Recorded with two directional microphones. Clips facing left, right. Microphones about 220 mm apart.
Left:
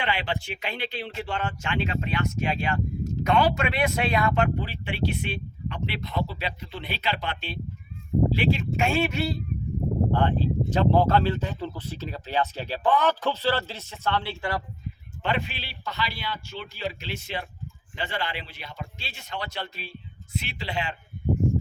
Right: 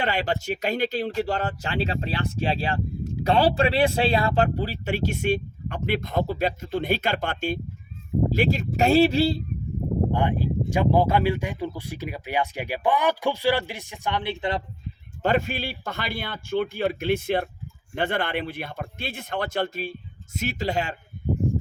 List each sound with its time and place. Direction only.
0.0 s speech: 40° right (ahead or behind)
10.1 s speech: 15° right (ahead or behind)
15.2 s speech: 45° right (ahead or behind)